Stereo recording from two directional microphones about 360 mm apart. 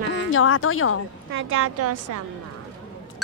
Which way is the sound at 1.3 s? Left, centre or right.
Right.